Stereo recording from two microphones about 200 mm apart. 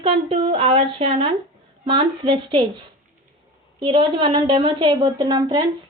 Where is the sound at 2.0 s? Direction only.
25° right (ahead or behind).